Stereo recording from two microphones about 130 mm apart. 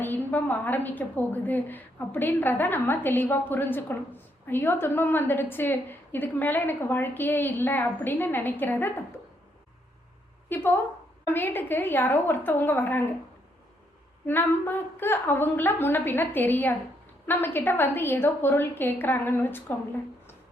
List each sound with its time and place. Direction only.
0.0 s a woman's voice: 15° left (ahead or behind)
10.5 s a woman's voice: 15° left (ahead or behind)
14.3 s a woman's voice: 15° left (ahead or behind)